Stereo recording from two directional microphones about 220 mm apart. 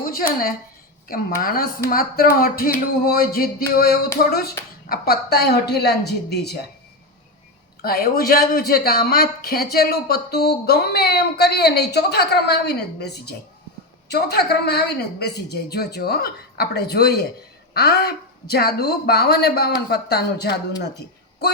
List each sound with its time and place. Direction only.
0.0 s a sound: 40° left (ahead or behind)
1.4 s a woman's voice: 40° left (ahead or behind)
7.8 s a woman's voice: 45° left (ahead or behind)